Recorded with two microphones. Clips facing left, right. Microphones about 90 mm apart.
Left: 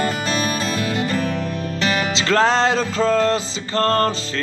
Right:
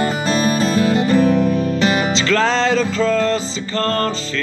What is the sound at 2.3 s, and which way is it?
Music, 45° left (ahead or behind).